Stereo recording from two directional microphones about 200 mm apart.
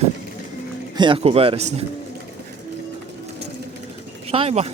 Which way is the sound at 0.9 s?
25° right (ahead or behind).